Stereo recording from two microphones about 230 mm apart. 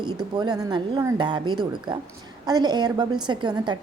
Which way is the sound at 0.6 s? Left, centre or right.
Centre.